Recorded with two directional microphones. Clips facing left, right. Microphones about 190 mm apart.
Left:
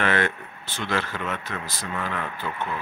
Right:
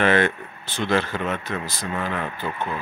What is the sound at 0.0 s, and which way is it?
Speech, 25° right (ahead or behind).